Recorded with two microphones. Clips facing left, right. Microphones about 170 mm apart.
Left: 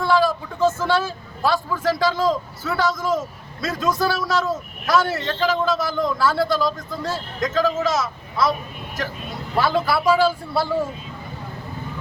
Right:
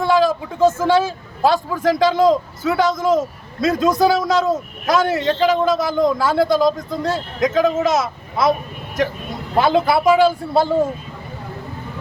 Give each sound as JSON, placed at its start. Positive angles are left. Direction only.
{"t": 0.0, "sound": "a man's voice", "side_deg": -20}
{"t": 9.6, "sound": "a man's voice", "side_deg": -20}